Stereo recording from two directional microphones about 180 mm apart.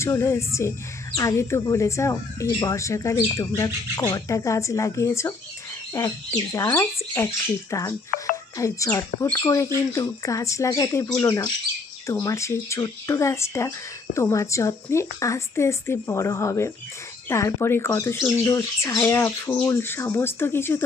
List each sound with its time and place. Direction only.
0.0 s speech: 15° left (ahead or behind)
8.1 s speech: 50° left (ahead or behind)
8.5 s speech: 15° left (ahead or behind)